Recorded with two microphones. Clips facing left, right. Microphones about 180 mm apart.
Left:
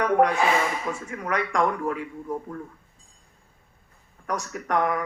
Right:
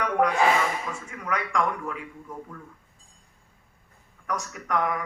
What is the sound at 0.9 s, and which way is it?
Speech, 30° left (ahead or behind).